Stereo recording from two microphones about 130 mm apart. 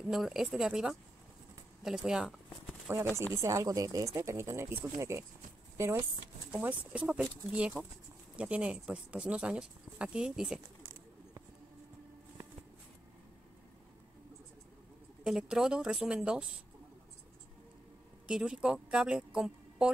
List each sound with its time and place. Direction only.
0.1 s speech: 5° right (ahead or behind)
1.8 s a sound: 5° right (ahead or behind)
2.9 s speech: 20° right (ahead or behind)
6.5 s speech: 10° right (ahead or behind)
15.2 s speech: 5° right (ahead or behind)
18.2 s a woman's voice: 5° right (ahead or behind)